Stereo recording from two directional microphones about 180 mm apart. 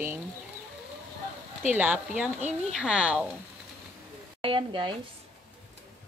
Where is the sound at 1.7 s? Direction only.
5° right (ahead or behind).